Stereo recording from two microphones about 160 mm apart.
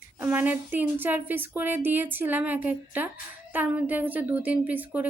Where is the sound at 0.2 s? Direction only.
10° right (ahead or behind).